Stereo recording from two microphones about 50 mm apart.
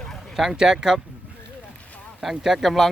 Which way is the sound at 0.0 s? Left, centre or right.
Centre.